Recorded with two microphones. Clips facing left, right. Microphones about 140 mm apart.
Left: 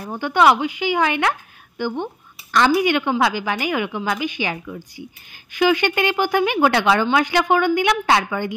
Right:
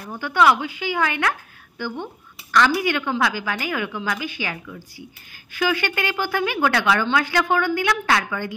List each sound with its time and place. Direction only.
0.2 s a woman's voice: 20° left (ahead or behind)